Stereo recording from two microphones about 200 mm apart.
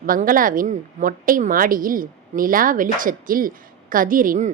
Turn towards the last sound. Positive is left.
turn(degrees=-40)  # may be behind; listen again after turning